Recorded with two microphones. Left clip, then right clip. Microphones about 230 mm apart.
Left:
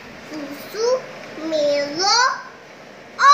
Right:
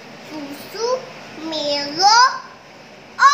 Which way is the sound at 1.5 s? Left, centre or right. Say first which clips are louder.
Left 3 dB; centre.